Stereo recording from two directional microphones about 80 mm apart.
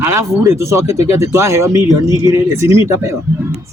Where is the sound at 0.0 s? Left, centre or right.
Right.